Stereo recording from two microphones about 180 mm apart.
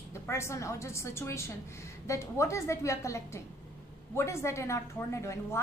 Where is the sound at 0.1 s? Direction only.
15° left (ahead or behind).